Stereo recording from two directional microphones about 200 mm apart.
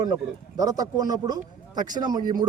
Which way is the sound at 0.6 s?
15° right (ahead or behind).